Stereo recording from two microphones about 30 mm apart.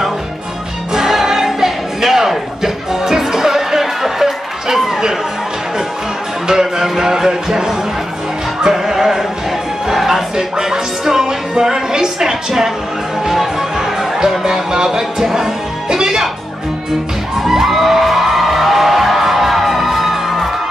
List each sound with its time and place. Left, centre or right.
0.9 s music: centre
6.4 s music: centre
10.3 s music: centre
14.4 s speech: right
16.0 s music: centre
17.4 s music: centre